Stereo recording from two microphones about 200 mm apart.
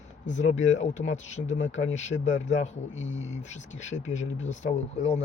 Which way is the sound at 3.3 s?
35° left (ahead or behind).